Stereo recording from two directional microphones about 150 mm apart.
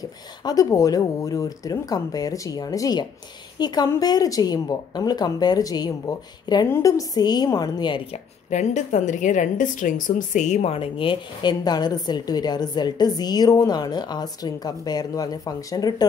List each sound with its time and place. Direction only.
0.0 s a woman's voice: 25° left (ahead or behind)
8.5 s a woman's voice: 50° left (ahead or behind); by 16.1 s 25° left (ahead or behind)